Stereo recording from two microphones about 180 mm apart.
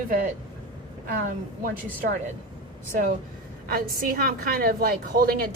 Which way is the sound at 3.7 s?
55° right (ahead or behind).